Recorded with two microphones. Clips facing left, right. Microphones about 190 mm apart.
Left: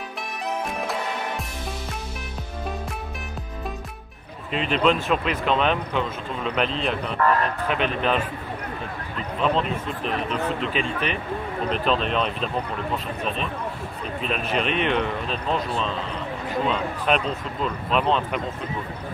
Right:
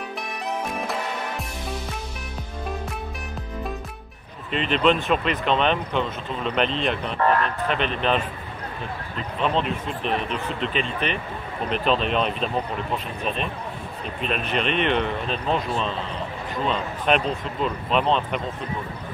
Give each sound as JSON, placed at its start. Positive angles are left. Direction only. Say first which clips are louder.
{"t": 4.5, "sound": "speech", "louder": "right 1 dB", "side_deg": 5}
{"t": 7.2, "sound": "speech", "louder": "even", "side_deg": -30}
{"t": 7.6, "sound": "speech", "louder": "even", "side_deg": 5}
{"t": 9.4, "sound": "speech", "louder": "even", "side_deg": 0}
{"t": 14.3, "sound": "speech", "louder": "even", "side_deg": 5}
{"t": 16.6, "sound": "speech", "louder": "right 2 dB", "side_deg": 5}